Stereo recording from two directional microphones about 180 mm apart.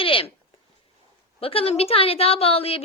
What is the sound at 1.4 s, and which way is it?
A woman's voice, 30° left (ahead or behind).